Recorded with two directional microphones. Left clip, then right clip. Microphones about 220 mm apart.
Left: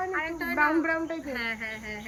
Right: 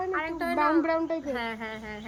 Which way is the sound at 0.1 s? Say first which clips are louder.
Right 1 dB; 10° right (ahead or behind).